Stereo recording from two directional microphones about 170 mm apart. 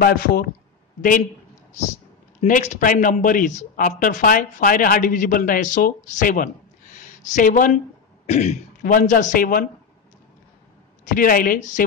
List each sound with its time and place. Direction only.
0.0 s a woman's voice: 60° left (ahead or behind)
2.4 s speech: 45° left (ahead or behind)
8.3 s speech: 40° left (ahead or behind)
11.1 s a woman's voice: 55° left (ahead or behind)